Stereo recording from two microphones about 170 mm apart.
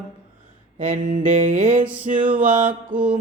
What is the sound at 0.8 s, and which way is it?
Music, 45° right (ahead or behind).